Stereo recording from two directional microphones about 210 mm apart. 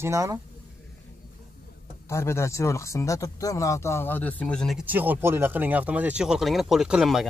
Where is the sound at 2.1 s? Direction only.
15° left (ahead or behind).